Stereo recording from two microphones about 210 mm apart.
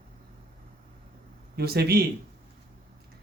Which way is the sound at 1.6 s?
50° right (ahead or behind).